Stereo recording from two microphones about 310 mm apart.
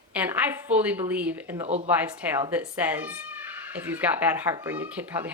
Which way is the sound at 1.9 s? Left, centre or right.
Centre.